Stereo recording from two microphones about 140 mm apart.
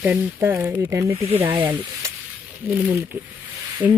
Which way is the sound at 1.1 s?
45° right (ahead or behind).